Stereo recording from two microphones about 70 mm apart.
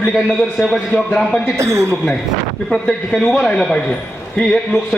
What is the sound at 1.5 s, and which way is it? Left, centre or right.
Speech, right.